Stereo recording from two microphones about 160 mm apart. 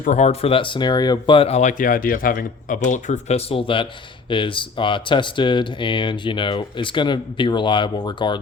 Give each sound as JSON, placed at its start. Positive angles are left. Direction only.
{"t": 0.0, "sound": "speech", "side_deg": 50}